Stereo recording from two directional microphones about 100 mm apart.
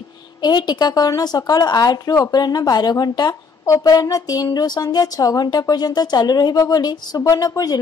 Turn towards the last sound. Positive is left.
turn(degrees=40)  # may be behind; listen again after turning